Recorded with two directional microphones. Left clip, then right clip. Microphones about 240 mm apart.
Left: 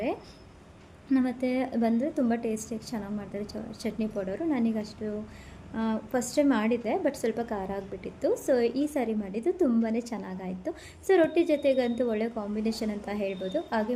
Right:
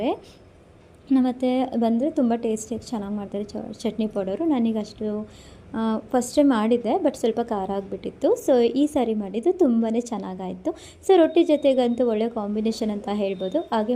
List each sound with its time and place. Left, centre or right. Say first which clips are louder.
1.1 s a woman's voice: right 6 dB; centre